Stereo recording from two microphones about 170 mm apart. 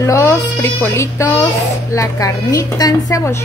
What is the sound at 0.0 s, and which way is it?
A woman's voice, 15° left (ahead or behind).